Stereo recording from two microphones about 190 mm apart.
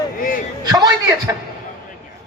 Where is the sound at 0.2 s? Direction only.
45° left (ahead or behind).